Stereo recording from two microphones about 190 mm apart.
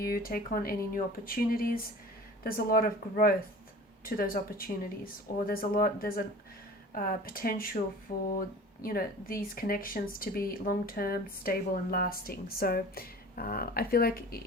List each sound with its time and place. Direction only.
0.0 s speech: 50° left (ahead or behind)